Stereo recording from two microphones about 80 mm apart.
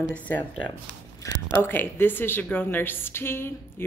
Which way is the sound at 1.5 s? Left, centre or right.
Left.